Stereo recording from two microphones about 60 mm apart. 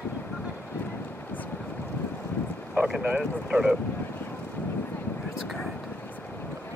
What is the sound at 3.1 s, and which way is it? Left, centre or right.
Speech, centre.